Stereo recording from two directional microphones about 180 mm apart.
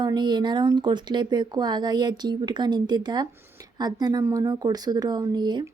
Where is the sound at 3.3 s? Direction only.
15° right (ahead or behind).